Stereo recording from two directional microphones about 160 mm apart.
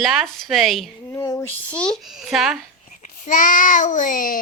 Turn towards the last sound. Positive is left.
turn(degrees=60)  # may be behind; listen again after turning